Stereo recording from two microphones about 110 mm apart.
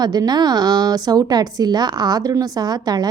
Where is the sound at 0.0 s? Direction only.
40° right (ahead or behind).